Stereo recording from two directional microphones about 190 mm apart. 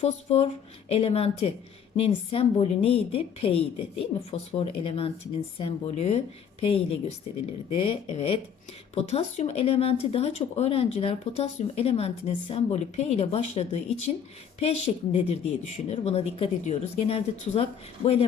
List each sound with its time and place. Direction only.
0.0 s speech: 35° left (ahead or behind)